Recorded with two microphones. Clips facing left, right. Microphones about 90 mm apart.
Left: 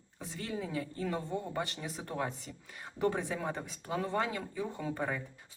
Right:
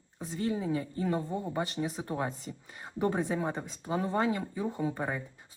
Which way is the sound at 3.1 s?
35° right (ahead or behind).